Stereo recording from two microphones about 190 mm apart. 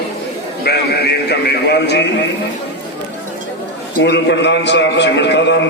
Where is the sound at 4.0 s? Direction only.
65° left (ahead or behind).